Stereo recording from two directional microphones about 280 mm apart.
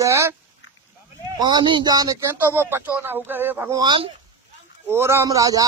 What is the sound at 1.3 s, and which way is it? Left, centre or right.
A man's voice, centre.